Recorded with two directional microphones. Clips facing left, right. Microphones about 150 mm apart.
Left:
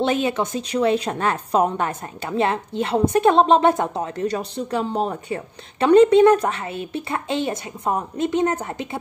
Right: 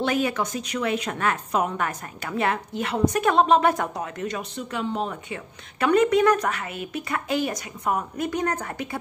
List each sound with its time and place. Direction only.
0.0 s a woman's voice: 25° left (ahead or behind)